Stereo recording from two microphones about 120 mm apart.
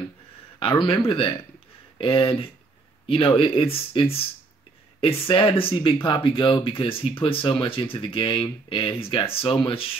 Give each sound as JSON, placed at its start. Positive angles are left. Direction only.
{"t": 0.6, "sound": "speech", "side_deg": 45}